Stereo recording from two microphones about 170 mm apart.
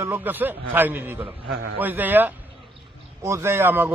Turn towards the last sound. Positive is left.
turn(degrees=-10)  # may be behind; listen again after turning